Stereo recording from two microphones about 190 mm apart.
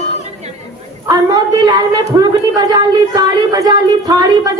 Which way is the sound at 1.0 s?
20° right (ahead or behind).